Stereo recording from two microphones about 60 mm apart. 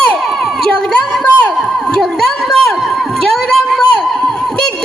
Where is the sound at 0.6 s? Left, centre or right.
Centre.